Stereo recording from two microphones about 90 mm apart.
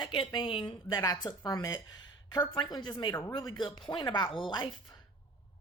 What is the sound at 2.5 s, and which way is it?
Speech, 55° left (ahead or behind).